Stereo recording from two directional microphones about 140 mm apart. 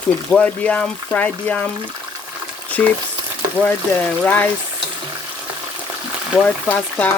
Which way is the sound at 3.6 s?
10° right (ahead or behind).